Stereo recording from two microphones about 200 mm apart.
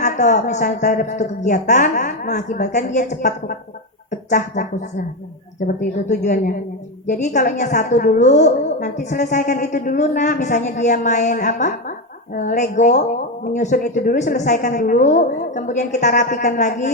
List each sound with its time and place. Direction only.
0.0 s a woman's voice: 35° left (ahead or behind)